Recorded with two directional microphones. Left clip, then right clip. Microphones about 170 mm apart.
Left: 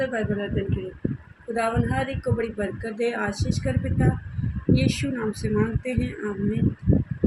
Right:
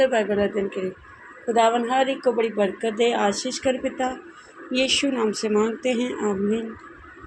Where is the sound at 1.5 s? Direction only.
25° right (ahead or behind).